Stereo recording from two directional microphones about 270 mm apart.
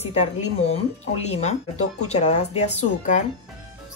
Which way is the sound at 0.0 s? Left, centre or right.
Left.